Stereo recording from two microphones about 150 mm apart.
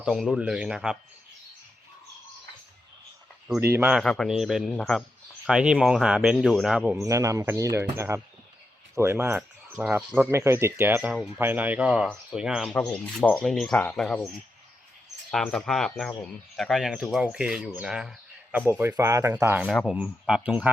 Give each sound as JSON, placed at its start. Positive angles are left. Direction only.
{"t": 0.0, "sound": "speech", "side_deg": 0}
{"t": 3.7, "sound": "speech", "side_deg": -15}
{"t": 3.9, "sound": "speech", "side_deg": 0}
{"t": 7.0, "sound": "speech", "side_deg": -20}
{"t": 18.8, "sound": "speech", "side_deg": -15}
{"t": 19.6, "sound": "speech", "side_deg": 0}